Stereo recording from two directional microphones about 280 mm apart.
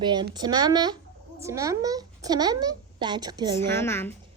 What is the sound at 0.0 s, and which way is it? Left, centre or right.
A child's voice, centre.